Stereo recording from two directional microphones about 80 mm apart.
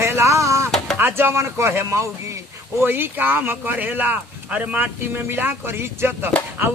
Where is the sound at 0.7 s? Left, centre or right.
Centre.